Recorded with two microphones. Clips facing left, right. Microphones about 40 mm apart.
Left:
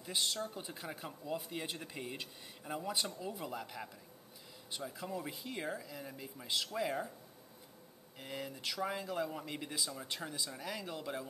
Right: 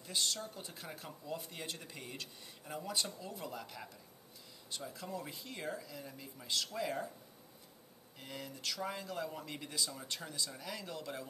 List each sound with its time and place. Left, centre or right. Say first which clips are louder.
0.0 s speech: left 1 dB; centre
8.2 s speech: left 3 dB; centre